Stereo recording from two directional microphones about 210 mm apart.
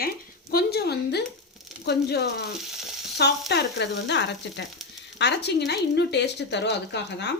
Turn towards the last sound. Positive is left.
turn(degrees=55)  # may be behind; listen again after turning